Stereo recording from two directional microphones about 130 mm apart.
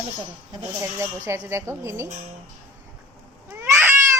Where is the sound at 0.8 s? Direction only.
20° right (ahead or behind).